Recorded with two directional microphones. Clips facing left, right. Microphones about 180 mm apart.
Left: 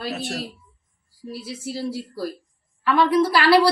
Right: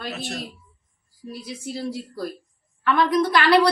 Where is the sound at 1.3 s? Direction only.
5° left (ahead or behind).